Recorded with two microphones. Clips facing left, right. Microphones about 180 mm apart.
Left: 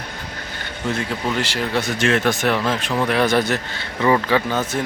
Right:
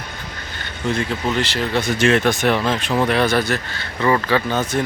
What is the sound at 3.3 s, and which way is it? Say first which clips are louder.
Speech: left 1 dB; 20° left (ahead or behind).